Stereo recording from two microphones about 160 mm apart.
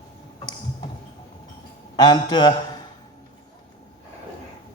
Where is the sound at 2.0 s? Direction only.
25° left (ahead or behind).